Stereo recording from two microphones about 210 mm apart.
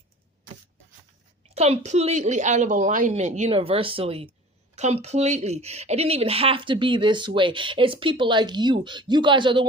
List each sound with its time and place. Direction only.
1.5 s a woman's voice: 30° right (ahead or behind)